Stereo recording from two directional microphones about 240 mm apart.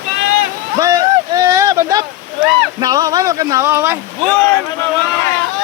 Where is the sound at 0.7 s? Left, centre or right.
Centre.